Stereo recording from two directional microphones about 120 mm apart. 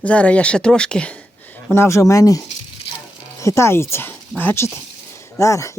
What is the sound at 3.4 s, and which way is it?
Speech, 25° left (ahead or behind).